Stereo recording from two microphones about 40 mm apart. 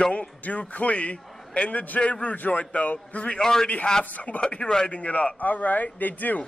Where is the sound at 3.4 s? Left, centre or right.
Centre.